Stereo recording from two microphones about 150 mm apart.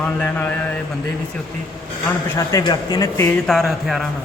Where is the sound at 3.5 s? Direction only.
Centre (ahead or behind).